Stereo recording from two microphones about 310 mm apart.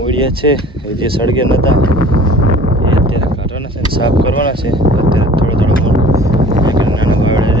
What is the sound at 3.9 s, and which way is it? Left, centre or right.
Speech, centre.